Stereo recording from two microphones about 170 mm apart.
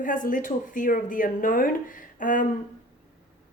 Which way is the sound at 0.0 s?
50° left (ahead or behind).